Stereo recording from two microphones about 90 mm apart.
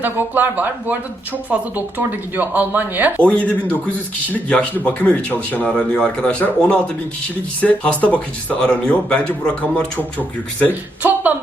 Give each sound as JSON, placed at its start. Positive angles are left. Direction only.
{"t": 0.0, "sound": "speech", "side_deg": -20}
{"t": 3.2, "sound": "speech", "side_deg": 15}
{"t": 10.7, "sound": "speech", "side_deg": -20}